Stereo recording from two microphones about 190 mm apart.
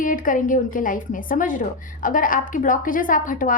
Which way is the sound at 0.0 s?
45° left (ahead or behind).